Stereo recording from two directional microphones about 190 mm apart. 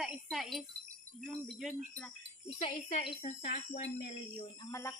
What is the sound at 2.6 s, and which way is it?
Speech, 30° left (ahead or behind).